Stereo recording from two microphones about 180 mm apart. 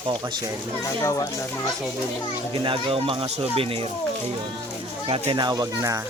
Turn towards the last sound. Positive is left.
turn(degrees=-20)  # may be behind; listen again after turning